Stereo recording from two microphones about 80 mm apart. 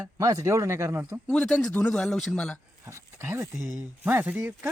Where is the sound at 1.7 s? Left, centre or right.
Centre.